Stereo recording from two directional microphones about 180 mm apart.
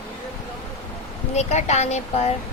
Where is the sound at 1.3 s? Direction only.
40° left (ahead or behind).